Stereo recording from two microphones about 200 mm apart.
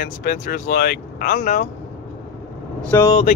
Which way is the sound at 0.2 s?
50° left (ahead or behind).